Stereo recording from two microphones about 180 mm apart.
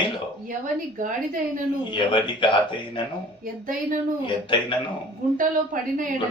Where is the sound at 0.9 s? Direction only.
45° right (ahead or behind).